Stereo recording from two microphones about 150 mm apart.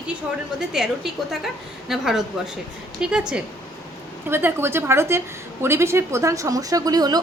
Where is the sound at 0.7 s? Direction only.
5° right (ahead or behind).